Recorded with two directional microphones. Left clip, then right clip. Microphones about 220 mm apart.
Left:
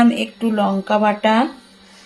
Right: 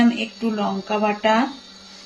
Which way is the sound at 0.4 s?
35° left (ahead or behind).